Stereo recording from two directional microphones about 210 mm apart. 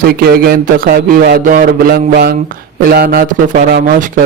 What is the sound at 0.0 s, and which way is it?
A man's voice, 45° right (ahead or behind).